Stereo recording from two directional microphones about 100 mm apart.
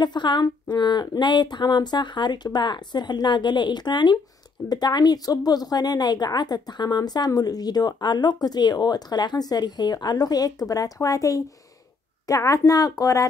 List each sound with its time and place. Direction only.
0.0 s a woman's voice: 50° left (ahead or behind)